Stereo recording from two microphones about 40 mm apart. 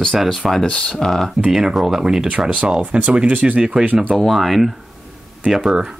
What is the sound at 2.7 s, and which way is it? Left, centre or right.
Speech, right.